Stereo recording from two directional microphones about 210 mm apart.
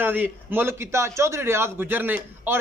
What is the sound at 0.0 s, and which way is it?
A man's voice, 10° right (ahead or behind).